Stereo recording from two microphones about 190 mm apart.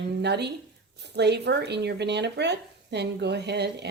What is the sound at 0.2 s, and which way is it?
Speech, 60° right (ahead or behind).